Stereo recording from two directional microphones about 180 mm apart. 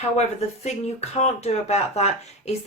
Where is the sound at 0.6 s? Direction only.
35° left (ahead or behind).